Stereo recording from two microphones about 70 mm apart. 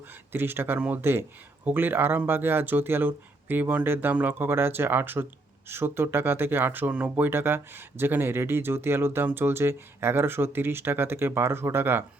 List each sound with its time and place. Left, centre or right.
0.3 s speech: right